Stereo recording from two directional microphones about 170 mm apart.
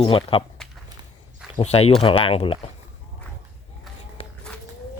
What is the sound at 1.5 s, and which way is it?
Speech, 35° left (ahead or behind).